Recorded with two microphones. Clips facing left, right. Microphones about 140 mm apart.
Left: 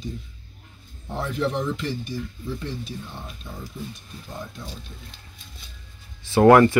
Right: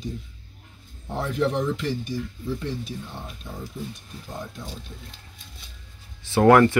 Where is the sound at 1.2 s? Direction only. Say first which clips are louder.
Right 1 dB; 10° right (ahead or behind).